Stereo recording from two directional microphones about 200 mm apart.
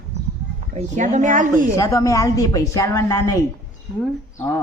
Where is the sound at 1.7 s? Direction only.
15° left (ahead or behind).